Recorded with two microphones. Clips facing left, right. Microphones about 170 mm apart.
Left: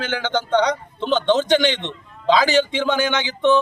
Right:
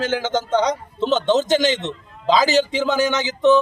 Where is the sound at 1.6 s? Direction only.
40° right (ahead or behind).